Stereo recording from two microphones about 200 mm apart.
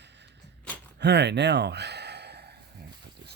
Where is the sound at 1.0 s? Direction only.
60° right (ahead or behind).